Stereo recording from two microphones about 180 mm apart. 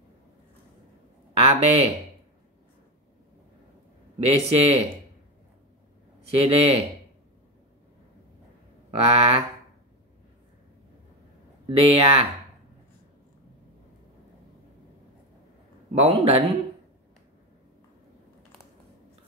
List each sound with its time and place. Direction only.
1.4 s speech: 30° right (ahead or behind)
4.2 s speech: 35° right (ahead or behind)
6.2 s speech: 35° right (ahead or behind)
8.9 s speech: 35° right (ahead or behind)
11.6 s speech: 30° right (ahead or behind)
15.9 s speech: 35° right (ahead or behind)